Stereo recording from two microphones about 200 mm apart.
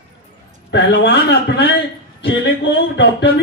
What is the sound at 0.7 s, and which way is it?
A man's voice, 60° left (ahead or behind).